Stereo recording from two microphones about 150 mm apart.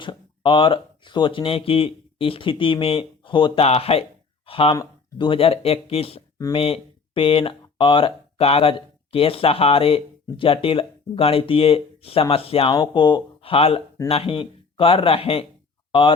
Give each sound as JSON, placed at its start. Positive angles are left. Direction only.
{"t": 0.0, "sound": "speech", "side_deg": 35}